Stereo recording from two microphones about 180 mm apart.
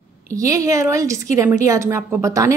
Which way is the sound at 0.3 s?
20° right (ahead or behind).